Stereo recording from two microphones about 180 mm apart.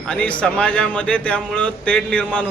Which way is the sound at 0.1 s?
5° left (ahead or behind).